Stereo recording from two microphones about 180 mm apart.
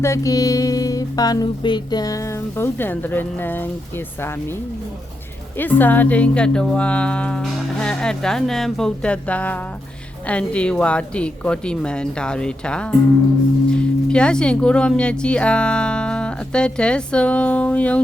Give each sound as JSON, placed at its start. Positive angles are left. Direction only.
{"t": 0.0, "sound": "music", "side_deg": 15}
{"t": 5.5, "sound": "music", "side_deg": 10}
{"t": 10.2, "sound": "speech", "side_deg": 5}